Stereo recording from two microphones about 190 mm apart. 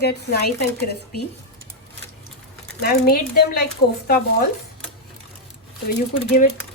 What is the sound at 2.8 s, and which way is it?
Speech, 55° left (ahead or behind).